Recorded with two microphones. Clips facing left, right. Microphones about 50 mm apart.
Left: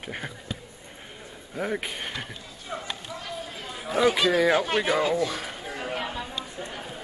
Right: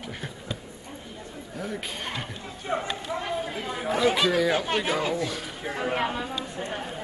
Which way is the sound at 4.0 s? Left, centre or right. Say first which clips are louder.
Left 2 dB; centre.